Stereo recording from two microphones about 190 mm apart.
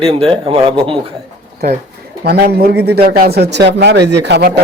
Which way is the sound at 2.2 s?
55° right (ahead or behind).